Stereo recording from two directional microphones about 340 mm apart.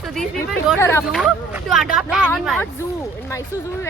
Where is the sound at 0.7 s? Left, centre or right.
Centre.